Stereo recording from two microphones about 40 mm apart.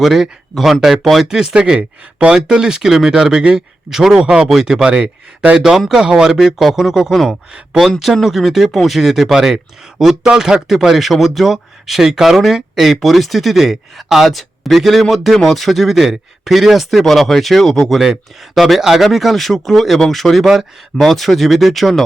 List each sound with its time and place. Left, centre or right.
0.0 s speech: centre
1.3 s speech: centre